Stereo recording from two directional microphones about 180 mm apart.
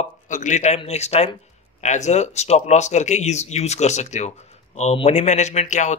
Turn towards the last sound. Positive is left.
turn(degrees=40)  # may be behind; listen again after turning